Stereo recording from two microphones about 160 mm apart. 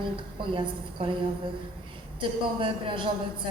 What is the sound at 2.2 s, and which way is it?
Speech, 30° right (ahead or behind).